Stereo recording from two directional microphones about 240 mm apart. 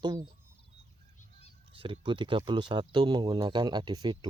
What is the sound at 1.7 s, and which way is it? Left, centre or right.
Speech, right.